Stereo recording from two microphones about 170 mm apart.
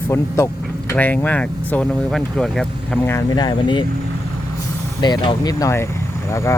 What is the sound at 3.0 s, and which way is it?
Speech, 15° left (ahead or behind).